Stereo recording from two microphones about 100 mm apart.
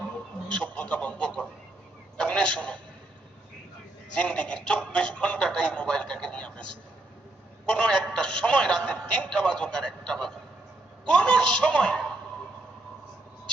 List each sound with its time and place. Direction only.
0.5 s a man's voice: 15° left (ahead or behind)
4.1 s speech: 10° left (ahead or behind)
7.7 s a man's voice: 10° left (ahead or behind)